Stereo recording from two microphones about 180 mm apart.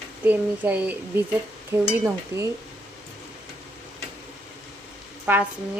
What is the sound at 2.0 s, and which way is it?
Speech, 15° right (ahead or behind).